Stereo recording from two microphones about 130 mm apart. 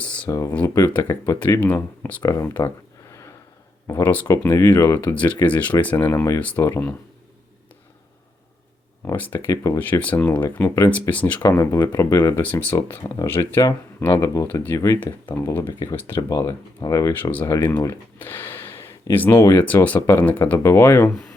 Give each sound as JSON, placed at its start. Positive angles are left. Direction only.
{"t": 0.3, "sound": "speech", "side_deg": 25}
{"t": 9.1, "sound": "speech", "side_deg": 15}
{"t": 19.3, "sound": "speech", "side_deg": 30}
{"t": 19.5, "sound": "speech", "side_deg": 15}